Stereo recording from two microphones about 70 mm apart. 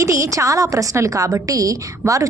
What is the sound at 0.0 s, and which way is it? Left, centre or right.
A woman's voice, right.